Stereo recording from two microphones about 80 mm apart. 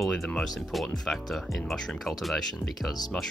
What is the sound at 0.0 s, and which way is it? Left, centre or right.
Speech, centre.